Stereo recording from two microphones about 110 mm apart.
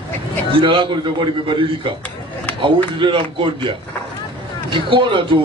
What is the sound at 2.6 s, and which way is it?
A man's voice, 50° right (ahead or behind).